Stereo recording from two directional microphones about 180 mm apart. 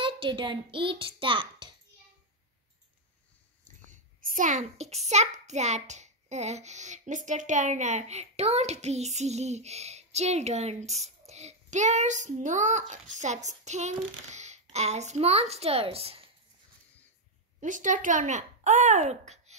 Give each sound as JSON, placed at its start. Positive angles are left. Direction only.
{"t": 0.0, "sound": "a child's voice", "side_deg": -30}
{"t": 3.6, "sound": "a child's voice", "side_deg": -45}
{"t": 17.6, "sound": "speech", "side_deg": -45}